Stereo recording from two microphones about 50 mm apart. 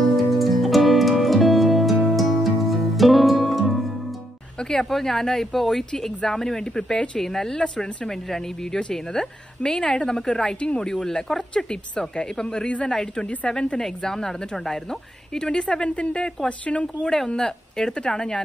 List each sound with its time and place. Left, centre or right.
0.1 s music: centre
4.6 s a woman's voice: centre
16.8 s a woman's voice: centre